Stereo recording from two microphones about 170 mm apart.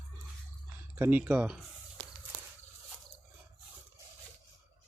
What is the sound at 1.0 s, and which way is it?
Speech, 10° right (ahead or behind).